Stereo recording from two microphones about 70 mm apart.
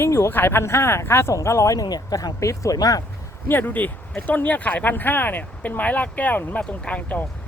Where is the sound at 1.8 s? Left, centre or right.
Left.